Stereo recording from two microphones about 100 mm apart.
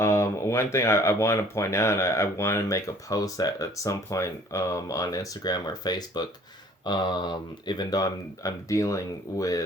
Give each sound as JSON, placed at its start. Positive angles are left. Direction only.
{"t": 0.0, "sound": "speech", "side_deg": 25}